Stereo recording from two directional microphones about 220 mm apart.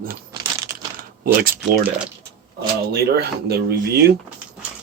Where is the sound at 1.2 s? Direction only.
40° right (ahead or behind).